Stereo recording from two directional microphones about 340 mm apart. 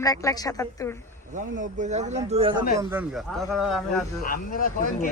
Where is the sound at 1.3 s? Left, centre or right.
Right.